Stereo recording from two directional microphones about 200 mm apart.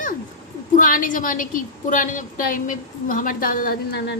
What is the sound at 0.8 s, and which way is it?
A woman's voice, 45° left (ahead or behind).